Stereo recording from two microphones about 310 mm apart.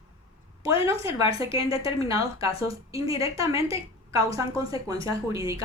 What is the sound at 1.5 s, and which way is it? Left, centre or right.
Speech, centre.